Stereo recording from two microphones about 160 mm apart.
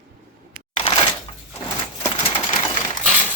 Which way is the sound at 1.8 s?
30° left (ahead or behind).